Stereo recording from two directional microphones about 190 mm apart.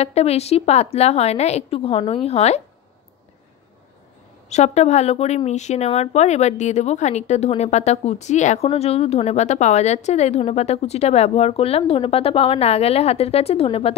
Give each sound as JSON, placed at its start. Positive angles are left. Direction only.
{"t": 0.0, "sound": "a woman's voice", "side_deg": 35}
{"t": 4.5, "sound": "a woman's voice", "side_deg": 35}